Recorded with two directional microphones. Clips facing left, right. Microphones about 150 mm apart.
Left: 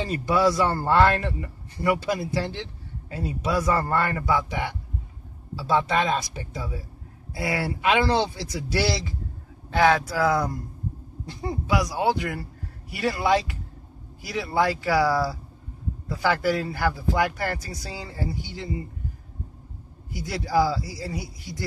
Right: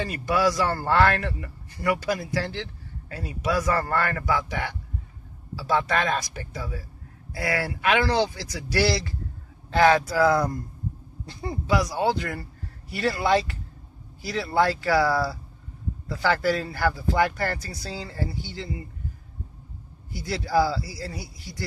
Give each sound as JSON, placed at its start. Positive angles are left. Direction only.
{"t": 0.0, "sound": "speech", "side_deg": 20}
{"t": 9.8, "sound": "speech", "side_deg": 5}
{"t": 20.1, "sound": "speech", "side_deg": 15}